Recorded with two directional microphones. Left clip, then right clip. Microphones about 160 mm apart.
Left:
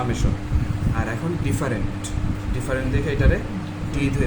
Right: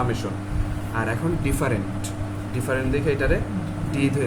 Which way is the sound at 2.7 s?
50° right (ahead or behind).